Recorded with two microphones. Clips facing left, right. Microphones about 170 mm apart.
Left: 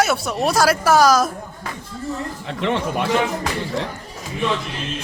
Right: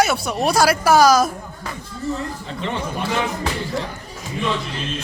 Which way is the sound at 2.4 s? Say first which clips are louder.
Left 8 dB; 75° left (ahead or behind).